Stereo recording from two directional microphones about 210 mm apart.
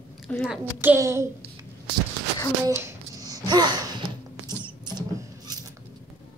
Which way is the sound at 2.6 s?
15° right (ahead or behind).